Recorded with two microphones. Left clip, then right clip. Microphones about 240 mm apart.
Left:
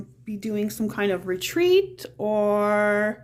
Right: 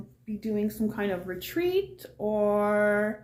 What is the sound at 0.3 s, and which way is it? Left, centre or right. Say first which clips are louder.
A woman's voice: left 2 dB; left.